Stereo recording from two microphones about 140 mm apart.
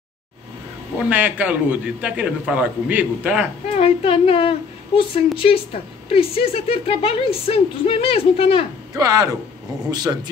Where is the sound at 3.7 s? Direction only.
40° left (ahead or behind).